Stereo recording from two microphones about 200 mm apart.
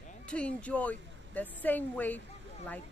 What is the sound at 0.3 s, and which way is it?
Speech, 5° left (ahead or behind).